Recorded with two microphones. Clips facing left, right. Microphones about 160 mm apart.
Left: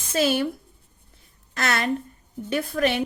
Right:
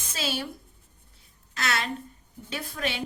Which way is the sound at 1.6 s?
55° left (ahead or behind).